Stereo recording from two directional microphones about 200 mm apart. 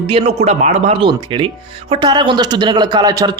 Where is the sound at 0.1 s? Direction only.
30° right (ahead or behind).